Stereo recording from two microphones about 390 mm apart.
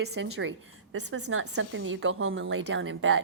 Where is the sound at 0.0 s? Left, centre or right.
Right.